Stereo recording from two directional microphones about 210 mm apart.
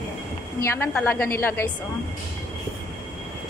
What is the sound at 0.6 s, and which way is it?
A woman's voice, 10° left (ahead or behind).